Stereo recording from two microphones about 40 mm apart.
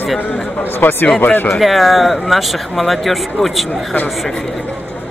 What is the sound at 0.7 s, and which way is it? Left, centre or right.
Speech, left.